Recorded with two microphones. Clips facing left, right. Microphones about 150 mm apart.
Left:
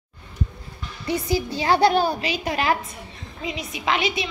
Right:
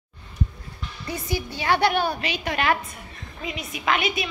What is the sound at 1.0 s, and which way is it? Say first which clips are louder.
A woman's voice: left 6 dB; 35° left (ahead or behind).